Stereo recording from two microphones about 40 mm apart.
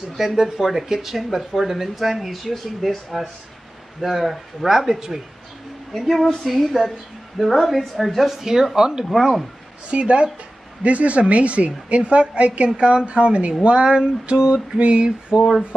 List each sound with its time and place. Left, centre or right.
0.2 s speech: centre
9.8 s a woman's voice: right